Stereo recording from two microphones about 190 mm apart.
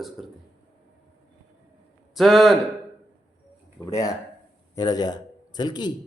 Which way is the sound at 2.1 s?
Centre (ahead or behind).